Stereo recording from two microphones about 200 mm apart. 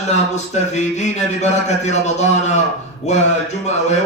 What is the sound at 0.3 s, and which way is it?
Speech, 35° left (ahead or behind).